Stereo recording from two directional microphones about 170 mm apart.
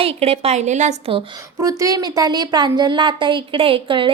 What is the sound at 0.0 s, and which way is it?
A woman's voice, 35° right (ahead or behind).